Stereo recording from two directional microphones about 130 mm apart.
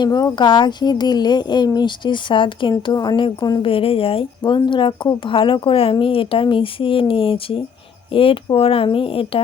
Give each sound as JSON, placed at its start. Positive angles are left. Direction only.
{"t": 0.0, "sound": "speech", "side_deg": 35}